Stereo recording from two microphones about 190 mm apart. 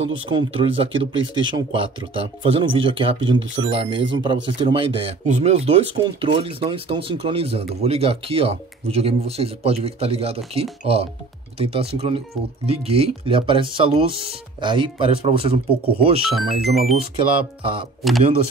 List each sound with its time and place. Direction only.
0.0 s speech: 25° right (ahead or behind)
16.3 s speech: centre (ahead or behind)
18.0 s speech: centre (ahead or behind)